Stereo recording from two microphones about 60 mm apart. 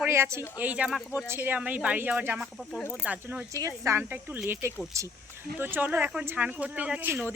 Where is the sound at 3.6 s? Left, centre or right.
Right.